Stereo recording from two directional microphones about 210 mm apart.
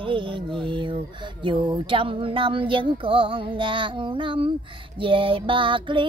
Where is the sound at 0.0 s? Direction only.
25° right (ahead or behind).